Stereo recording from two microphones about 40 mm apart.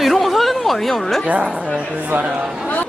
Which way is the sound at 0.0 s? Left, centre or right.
Centre.